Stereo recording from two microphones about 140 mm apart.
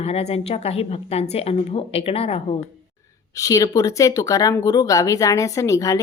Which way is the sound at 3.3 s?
25° left (ahead or behind).